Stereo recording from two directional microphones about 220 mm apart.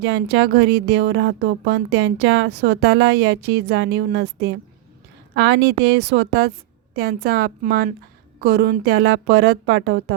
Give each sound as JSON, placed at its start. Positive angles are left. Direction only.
{"t": 0.0, "sound": "a woman's voice", "side_deg": -50}